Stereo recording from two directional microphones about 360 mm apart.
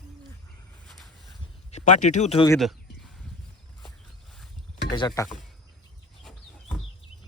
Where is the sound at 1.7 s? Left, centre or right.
Centre.